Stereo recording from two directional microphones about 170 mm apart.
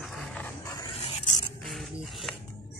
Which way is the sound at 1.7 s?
Centre (ahead or behind).